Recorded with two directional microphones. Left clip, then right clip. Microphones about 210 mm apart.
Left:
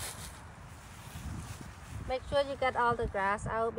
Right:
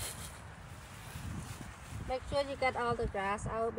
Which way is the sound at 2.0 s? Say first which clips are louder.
Left 4 dB; centre (ahead or behind).